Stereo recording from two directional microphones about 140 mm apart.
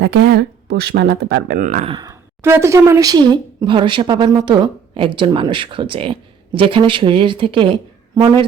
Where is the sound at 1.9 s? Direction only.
30° right (ahead or behind).